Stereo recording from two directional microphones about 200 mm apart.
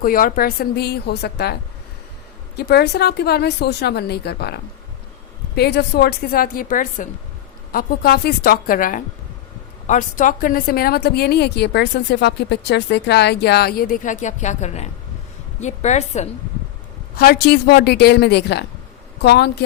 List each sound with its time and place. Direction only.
0.0 s a woman's voice: 45° left (ahead or behind)
2.6 s a woman's voice: 55° left (ahead or behind); by 16.3 s 35° left (ahead or behind)
17.2 s a woman's voice: 50° left (ahead or behind)